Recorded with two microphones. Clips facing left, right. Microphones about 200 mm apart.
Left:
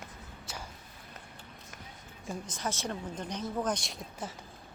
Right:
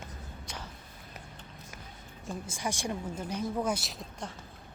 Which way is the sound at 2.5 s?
10° right (ahead or behind).